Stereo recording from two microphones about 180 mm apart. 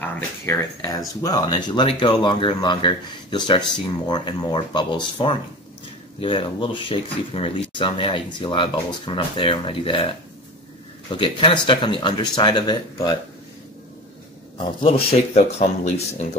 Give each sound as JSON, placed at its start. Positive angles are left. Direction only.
{"t": 0.0, "sound": "speech", "side_deg": 10}
{"t": 6.2, "sound": "speech", "side_deg": 30}
{"t": 11.1, "sound": "speech", "side_deg": 25}
{"t": 14.6, "sound": "speech", "side_deg": 30}